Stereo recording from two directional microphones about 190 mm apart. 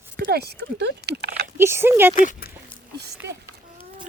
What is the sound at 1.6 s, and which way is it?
Speech, 15° right (ahead or behind).